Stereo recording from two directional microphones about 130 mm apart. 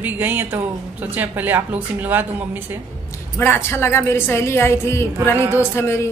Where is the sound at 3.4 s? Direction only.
15° left (ahead or behind).